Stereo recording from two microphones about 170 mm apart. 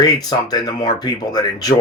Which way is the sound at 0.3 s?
20° left (ahead or behind).